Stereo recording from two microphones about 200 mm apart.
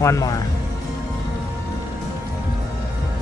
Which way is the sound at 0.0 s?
15° left (ahead or behind).